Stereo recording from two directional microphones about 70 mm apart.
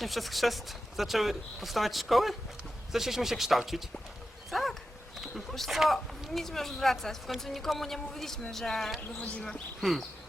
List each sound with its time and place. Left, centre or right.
0.0 s speech: centre
9.0 s speech: centre
9.8 s speech: centre